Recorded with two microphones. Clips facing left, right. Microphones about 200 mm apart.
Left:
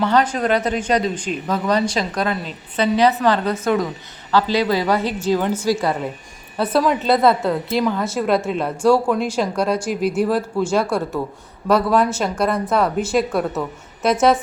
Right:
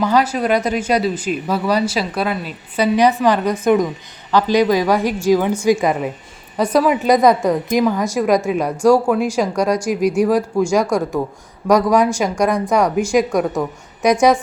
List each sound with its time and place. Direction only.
0.0 s a woman's voice: 10° right (ahead or behind)